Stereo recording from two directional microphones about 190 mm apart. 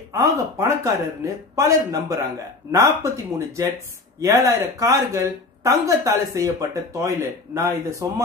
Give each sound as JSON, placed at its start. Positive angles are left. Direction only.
{"t": 0.1, "sound": "a woman's voice", "side_deg": -15}